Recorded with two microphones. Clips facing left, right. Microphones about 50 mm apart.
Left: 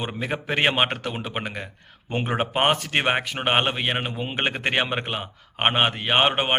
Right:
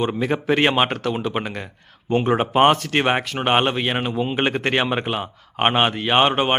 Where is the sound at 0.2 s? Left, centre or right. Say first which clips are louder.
Right 3 dB; centre.